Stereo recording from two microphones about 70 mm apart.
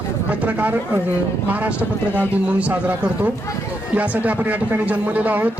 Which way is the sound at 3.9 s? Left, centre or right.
Right.